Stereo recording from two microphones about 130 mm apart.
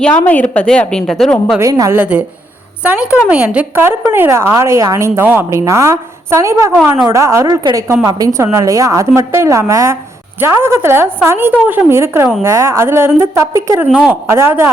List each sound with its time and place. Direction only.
0.0 s a woman's voice: 10° left (ahead or behind)
1.5 s a woman's voice: 20° right (ahead or behind)
2.0 s a woman's voice: 10° right (ahead or behind)
13.9 s a woman's voice: 5° right (ahead or behind)
14.3 s a woman's voice: 20° right (ahead or behind)